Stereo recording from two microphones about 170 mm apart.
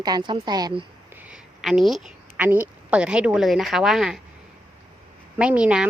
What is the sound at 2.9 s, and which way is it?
A woman's voice, 5° right (ahead or behind).